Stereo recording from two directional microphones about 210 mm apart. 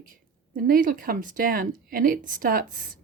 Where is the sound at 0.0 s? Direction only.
40° right (ahead or behind).